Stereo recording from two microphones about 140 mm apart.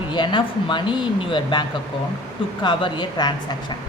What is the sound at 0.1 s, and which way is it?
A woman's voice, 35° left (ahead or behind).